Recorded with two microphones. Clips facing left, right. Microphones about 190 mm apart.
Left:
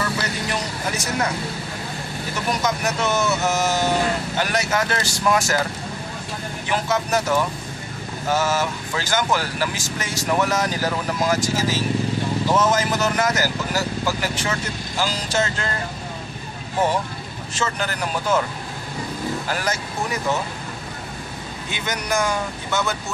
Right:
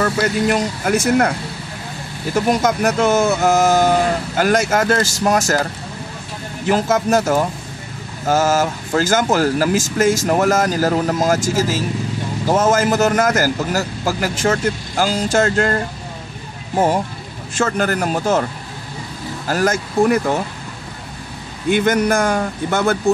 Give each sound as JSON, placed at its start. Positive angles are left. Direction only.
{"t": 0.0, "sound": "speech", "side_deg": -50}
{"t": 2.6, "sound": "speech", "side_deg": -50}
{"t": 6.7, "sound": "speech", "side_deg": -45}
{"t": 17.6, "sound": "speech", "side_deg": -50}
{"t": 19.4, "sound": "speech", "side_deg": -45}
{"t": 21.6, "sound": "speech", "side_deg": -55}